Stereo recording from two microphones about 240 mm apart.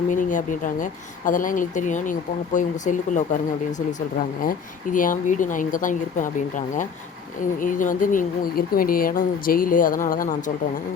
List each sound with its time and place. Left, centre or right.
0.1 s speech: left
4.4 s speech: left